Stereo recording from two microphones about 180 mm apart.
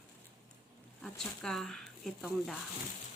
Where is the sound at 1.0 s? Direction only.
5° left (ahead or behind).